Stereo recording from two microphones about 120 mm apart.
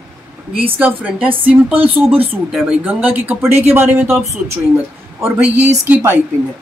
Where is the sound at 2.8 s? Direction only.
15° right (ahead or behind).